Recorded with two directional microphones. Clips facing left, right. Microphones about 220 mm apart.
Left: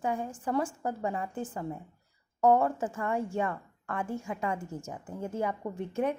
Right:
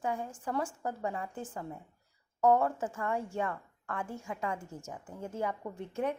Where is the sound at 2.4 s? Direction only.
20° left (ahead or behind).